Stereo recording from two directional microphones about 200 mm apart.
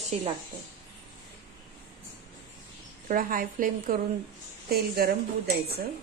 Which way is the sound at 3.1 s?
45° right (ahead or behind).